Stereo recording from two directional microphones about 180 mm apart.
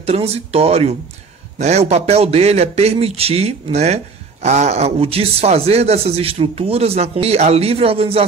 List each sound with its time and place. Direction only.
0.0 s a man's voice: 35° right (ahead or behind)